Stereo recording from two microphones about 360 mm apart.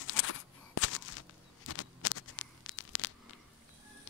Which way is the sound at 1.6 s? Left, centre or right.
Left.